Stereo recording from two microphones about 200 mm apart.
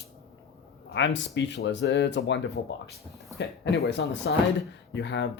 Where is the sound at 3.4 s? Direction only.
55° left (ahead or behind).